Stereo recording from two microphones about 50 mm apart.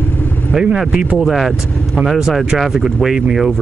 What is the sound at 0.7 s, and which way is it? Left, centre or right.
Speech, centre.